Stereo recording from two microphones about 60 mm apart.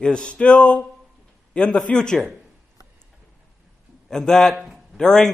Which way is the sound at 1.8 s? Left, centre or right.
Centre.